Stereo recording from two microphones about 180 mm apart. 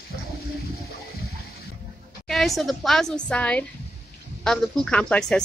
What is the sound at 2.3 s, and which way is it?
Speech, centre (ahead or behind).